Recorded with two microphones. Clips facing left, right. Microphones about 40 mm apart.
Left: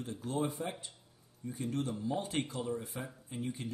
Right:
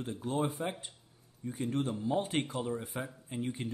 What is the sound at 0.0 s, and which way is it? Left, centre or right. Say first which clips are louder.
Speech: right 2 dB; right.